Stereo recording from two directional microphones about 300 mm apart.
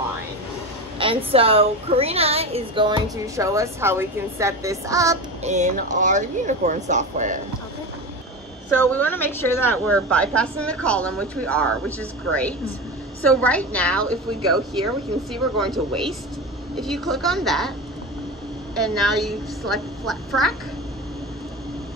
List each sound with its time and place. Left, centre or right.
0.9 s a woman's voice: centre
5.4 s speech: right
8.6 s a woman's voice: centre
18.8 s a woman's voice: centre